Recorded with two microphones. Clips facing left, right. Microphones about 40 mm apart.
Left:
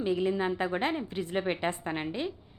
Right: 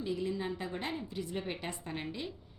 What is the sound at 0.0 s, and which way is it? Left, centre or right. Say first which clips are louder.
A woman's voice: left 7 dB; left.